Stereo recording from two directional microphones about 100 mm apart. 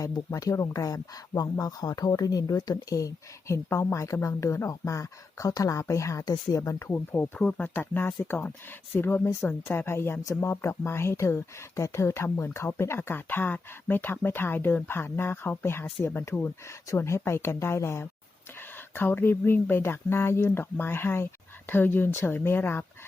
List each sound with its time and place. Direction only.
0.3 s speech: 35° left (ahead or behind)
7.3 s speech: 10° left (ahead or behind)